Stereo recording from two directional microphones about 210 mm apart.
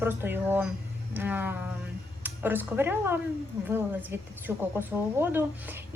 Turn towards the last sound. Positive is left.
turn(degrees=-10)  # may be behind; listen again after turning